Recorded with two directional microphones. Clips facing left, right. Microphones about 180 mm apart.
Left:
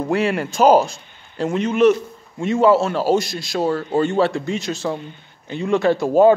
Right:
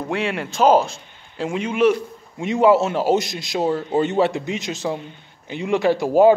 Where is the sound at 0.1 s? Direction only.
Centre (ahead or behind).